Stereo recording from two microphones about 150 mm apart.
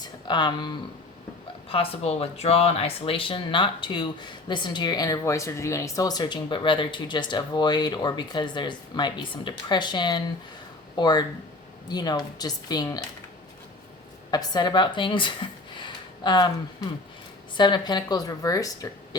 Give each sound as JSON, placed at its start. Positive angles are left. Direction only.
{"t": 0.0, "sound": "a sound", "side_deg": 30}
{"t": 1.7, "sound": "speech", "side_deg": 40}
{"t": 14.3, "sound": "speech", "side_deg": 25}